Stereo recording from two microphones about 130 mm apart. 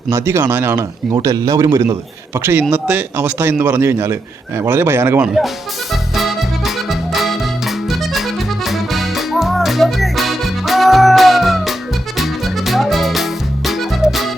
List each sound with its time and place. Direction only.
0.1 s speech: 20° right (ahead or behind)
5.9 s accordion: centre (ahead or behind)
7.9 s music: centre (ahead or behind)